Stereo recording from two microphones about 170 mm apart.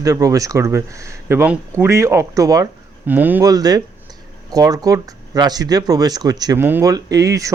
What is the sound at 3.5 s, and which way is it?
Speech, 20° right (ahead or behind).